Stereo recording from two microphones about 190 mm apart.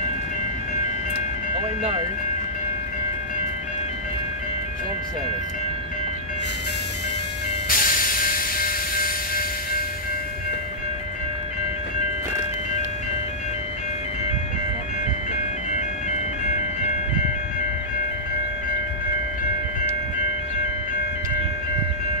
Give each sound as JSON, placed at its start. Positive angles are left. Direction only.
{"t": 7.6, "sound": "music", "side_deg": 50}